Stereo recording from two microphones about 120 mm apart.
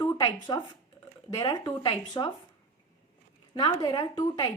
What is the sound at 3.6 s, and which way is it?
Speech, 35° left (ahead or behind).